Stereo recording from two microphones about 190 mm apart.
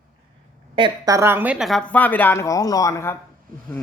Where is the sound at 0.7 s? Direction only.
25° right (ahead or behind).